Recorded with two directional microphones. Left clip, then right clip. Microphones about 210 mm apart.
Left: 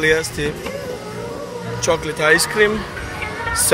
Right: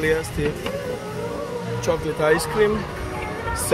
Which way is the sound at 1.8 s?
5° left (ahead or behind).